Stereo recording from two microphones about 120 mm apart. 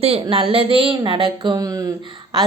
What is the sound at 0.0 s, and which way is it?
Speech, 50° right (ahead or behind).